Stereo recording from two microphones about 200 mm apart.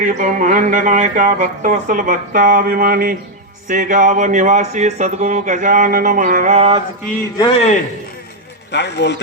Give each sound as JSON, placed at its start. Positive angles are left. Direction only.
{"t": 0.0, "sound": "speech", "side_deg": -40}
{"t": 7.3, "sound": "a man's voice", "side_deg": 25}
{"t": 8.7, "sound": "speech", "side_deg": 60}